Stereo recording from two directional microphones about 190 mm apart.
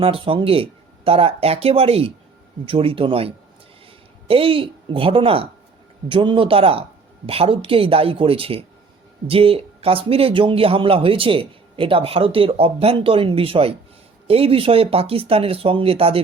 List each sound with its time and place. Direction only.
0.0 s speech: 30° right (ahead or behind)